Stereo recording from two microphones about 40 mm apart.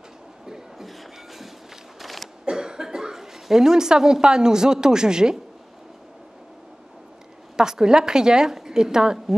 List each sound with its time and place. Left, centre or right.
0.5 s beatboxing: centre
2.0 s a sound: centre
2.4 s speech: centre
7.5 s a woman's voice: centre